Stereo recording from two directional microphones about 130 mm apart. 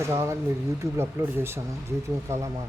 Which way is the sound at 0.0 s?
20° right (ahead or behind).